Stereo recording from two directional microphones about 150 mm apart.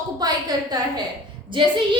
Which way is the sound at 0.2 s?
25° right (ahead or behind).